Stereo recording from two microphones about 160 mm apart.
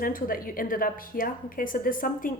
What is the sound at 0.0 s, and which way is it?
Speech, 60° left (ahead or behind).